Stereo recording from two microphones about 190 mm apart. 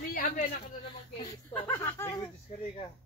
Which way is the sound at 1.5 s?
10° left (ahead or behind).